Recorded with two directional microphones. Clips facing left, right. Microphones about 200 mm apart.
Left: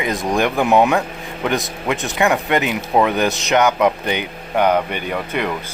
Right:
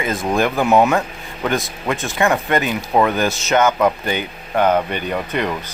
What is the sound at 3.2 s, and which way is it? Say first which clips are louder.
Speech: even; 15° left (ahead or behind).